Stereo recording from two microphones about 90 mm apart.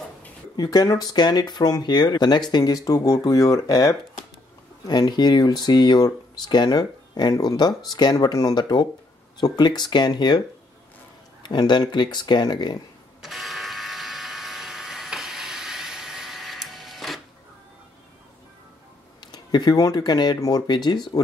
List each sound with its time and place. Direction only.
0.6 s speech: 45° left (ahead or behind)
11.4 s speech: 55° left (ahead or behind)
13.2 s a sound: centre (ahead or behind)
19.3 s speech: 50° left (ahead or behind)